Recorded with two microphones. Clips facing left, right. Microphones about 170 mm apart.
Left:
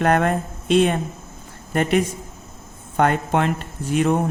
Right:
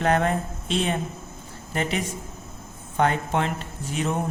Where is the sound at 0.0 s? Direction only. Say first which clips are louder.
Left 3 dB; 55° left (ahead or behind).